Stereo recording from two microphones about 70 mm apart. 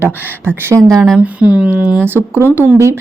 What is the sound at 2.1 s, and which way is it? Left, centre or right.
Speech, right.